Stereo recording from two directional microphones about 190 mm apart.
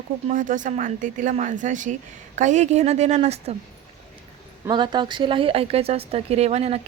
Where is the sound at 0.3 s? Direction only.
40° right (ahead or behind).